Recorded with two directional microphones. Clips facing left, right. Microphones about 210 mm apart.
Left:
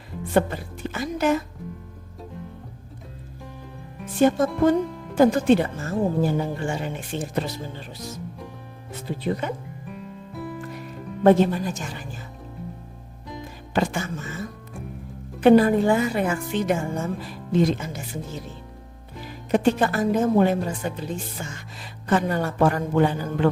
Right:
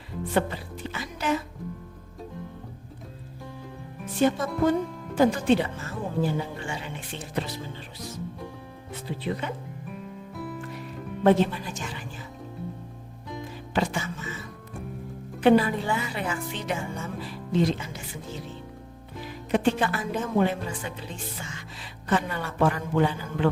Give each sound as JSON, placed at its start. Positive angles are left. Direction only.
{"t": 0.3, "sound": "a woman's voice", "side_deg": 45}
{"t": 4.2, "sound": "a woman's voice", "side_deg": 50}
{"t": 9.0, "sound": "a woman's voice", "side_deg": 45}
{"t": 11.2, "sound": "a woman's voice", "side_deg": 45}
{"t": 13.7, "sound": "a woman's voice", "side_deg": 50}
{"t": 19.5, "sound": "a woman's voice", "side_deg": 40}